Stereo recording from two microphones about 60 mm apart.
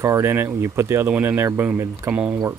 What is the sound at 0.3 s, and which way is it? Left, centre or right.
Speech, right.